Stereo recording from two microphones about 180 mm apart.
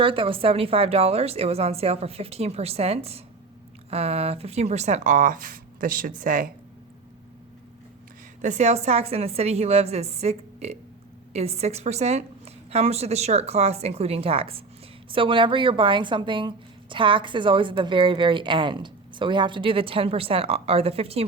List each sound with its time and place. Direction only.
0.0 s a woman's voice: 30° right (ahead or behind); by 6.5 s 50° right (ahead or behind)
8.4 s a woman's voice: 40° right (ahead or behind)